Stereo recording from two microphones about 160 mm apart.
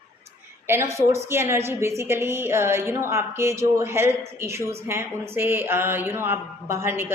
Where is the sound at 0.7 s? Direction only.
15° right (ahead or behind).